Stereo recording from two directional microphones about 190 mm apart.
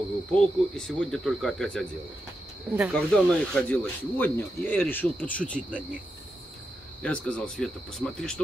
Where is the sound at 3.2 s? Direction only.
5° left (ahead or behind).